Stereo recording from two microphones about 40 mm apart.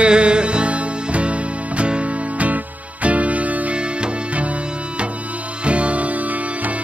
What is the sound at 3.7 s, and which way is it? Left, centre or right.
Music, right.